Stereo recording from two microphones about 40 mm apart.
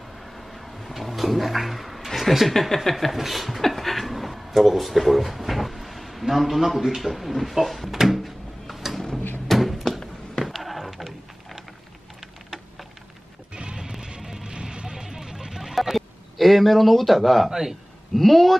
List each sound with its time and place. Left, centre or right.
0.3 s a sound: centre
2.0 s chuckle: centre
7.0 s drawer open or close: centre
9.5 s a sound: centre
13.5 s music: right; by 17.5 s centre
17.5 s a man's voice: centre
18.1 s speech: centre